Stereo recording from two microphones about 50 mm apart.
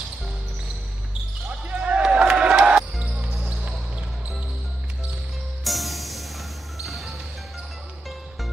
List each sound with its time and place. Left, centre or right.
1.7 s a sound: right
2.1 s music: right
5.6 s music: centre